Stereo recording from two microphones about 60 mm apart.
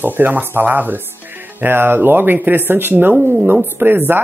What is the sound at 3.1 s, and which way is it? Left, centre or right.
Speech, right.